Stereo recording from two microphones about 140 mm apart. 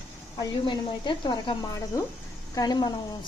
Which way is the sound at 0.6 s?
35° left (ahead or behind).